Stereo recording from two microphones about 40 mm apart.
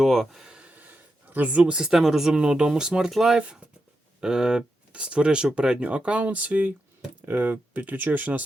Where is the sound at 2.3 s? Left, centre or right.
Right.